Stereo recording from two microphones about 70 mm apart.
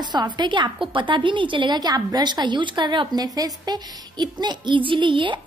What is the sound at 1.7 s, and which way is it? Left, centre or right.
A woman's voice, right.